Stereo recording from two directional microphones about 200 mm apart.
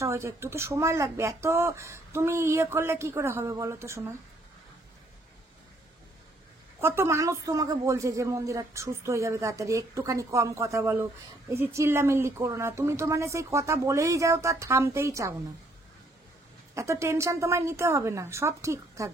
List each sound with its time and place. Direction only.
0.0 s speech: 15° right (ahead or behind)
6.8 s speech: 10° right (ahead or behind)
16.7 s speech: 15° right (ahead or behind)